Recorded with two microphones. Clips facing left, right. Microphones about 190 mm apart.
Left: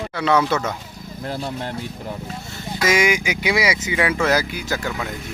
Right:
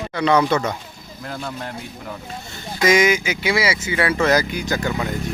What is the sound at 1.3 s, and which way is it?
Speech, 30° left (ahead or behind).